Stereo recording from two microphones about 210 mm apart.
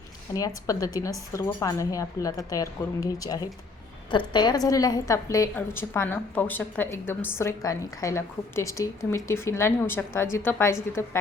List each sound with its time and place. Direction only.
0.3 s a woman's voice: 15° left (ahead or behind)